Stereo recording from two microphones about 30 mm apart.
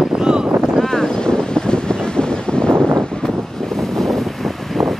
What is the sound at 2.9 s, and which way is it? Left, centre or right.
Wind, centre.